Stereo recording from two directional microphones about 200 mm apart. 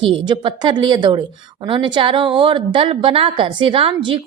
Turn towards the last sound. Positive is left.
turn(degrees=-25)  # may be behind; listen again after turning